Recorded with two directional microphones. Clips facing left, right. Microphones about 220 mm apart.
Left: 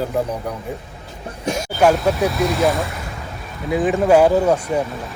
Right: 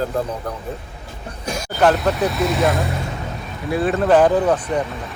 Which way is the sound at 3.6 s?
15° left (ahead or behind).